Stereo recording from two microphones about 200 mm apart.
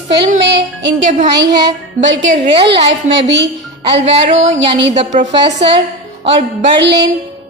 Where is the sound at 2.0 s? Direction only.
70° right (ahead or behind).